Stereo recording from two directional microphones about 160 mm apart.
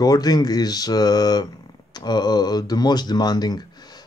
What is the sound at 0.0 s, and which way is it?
Speech, 25° left (ahead or behind).